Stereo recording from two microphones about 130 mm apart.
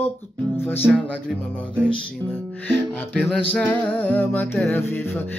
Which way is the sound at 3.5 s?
10° left (ahead or behind).